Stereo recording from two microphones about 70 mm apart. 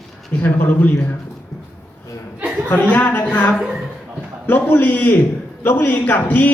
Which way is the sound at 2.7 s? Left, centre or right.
Left.